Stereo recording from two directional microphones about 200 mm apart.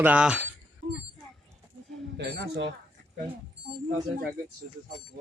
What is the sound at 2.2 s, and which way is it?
Speech, 55° right (ahead or behind).